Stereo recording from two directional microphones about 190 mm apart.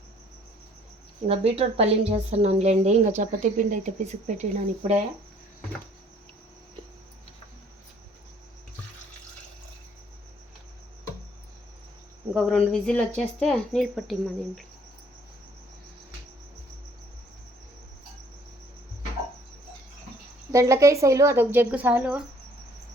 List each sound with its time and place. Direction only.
1.3 s a woman's voice: 30° right (ahead or behind)
12.3 s speech: centre (ahead or behind)
20.5 s a woman's voice: 15° right (ahead or behind)